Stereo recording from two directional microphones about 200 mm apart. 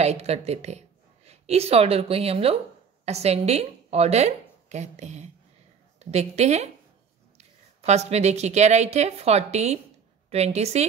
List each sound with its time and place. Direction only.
0.0 s a woman's voice: 35° right (ahead or behind)